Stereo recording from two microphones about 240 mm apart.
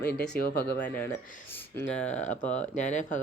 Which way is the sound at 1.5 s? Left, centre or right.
Centre.